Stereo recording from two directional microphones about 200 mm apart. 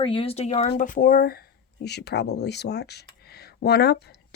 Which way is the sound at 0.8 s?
45° left (ahead or behind).